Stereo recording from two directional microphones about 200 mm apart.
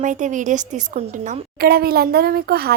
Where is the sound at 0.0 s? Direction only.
40° right (ahead or behind).